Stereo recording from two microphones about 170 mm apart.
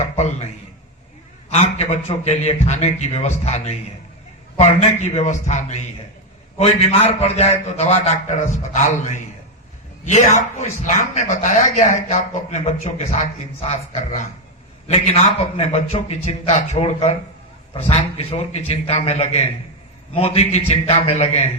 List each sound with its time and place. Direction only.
0.0 s a man's voice: 40° left (ahead or behind)
1.5 s a man's voice: 40° left (ahead or behind)